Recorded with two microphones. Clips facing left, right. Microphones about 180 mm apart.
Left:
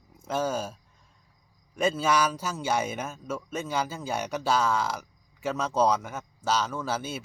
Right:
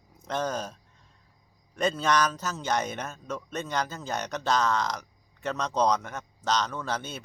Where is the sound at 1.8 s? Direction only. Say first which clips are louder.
Left 1 dB; 5° left (ahead or behind).